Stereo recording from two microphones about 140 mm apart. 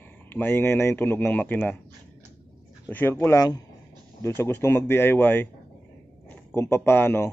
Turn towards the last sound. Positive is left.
turn(degrees=15)  # may be behind; listen again after turning